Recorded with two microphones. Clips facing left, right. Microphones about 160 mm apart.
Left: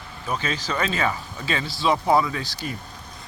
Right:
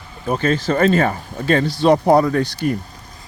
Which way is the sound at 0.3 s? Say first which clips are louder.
Right 9 dB; 55° right (ahead or behind).